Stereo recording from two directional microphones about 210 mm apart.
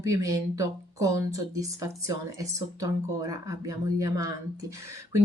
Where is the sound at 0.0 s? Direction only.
15° right (ahead or behind).